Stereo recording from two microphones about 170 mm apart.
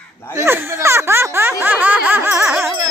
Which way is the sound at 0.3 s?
15° right (ahead or behind).